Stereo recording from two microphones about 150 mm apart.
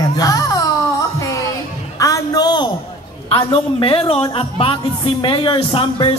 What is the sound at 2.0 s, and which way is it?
Music, 25° left (ahead or behind).